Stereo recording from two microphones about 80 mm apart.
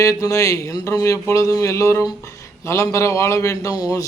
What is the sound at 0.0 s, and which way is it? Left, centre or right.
Speech, left.